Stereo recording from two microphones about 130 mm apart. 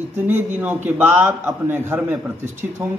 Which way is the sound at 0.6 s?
15° right (ahead or behind).